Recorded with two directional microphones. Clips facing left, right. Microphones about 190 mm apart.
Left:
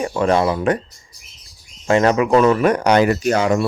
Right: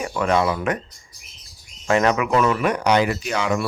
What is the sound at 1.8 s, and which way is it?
Speech, 35° left (ahead or behind).